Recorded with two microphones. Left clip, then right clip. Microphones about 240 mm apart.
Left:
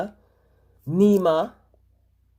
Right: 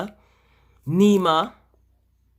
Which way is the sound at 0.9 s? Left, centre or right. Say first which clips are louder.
Even; right.